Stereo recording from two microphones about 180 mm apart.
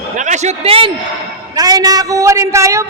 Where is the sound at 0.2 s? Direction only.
40° right (ahead or behind).